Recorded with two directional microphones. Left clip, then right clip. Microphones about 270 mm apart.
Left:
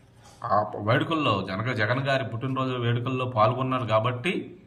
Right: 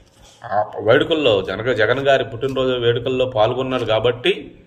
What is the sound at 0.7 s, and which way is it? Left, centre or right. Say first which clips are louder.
A man's voice: right 10 dB; centre.